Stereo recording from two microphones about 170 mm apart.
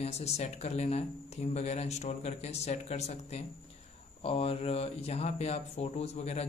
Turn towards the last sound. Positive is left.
turn(degrees=40)  # may be behind; listen again after turning